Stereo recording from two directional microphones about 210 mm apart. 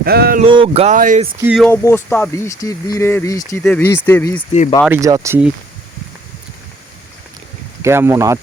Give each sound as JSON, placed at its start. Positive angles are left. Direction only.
{"t": 0.0, "sound": "a sound", "side_deg": -45}
{"t": 0.4, "sound": "speech", "side_deg": -25}
{"t": 1.4, "sound": "speech", "side_deg": -5}
{"t": 1.7, "sound": "speech", "side_deg": 10}
{"t": 4.9, "sound": "speech", "side_deg": -15}
{"t": 7.8, "sound": "speech", "side_deg": -10}